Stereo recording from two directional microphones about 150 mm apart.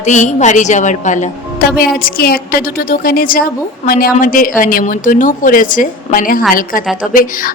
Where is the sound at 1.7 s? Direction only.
85° left.